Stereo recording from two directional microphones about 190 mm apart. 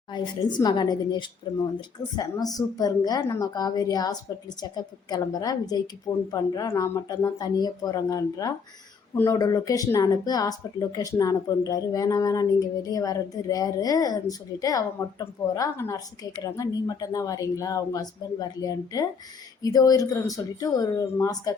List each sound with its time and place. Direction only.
0.1 s speech: 25° left (ahead or behind)